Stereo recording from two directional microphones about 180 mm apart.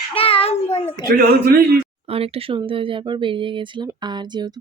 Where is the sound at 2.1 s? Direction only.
30° right (ahead or behind).